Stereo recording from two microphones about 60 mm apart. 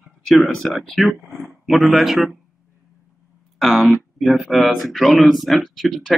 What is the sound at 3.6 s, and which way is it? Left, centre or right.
Speech, centre.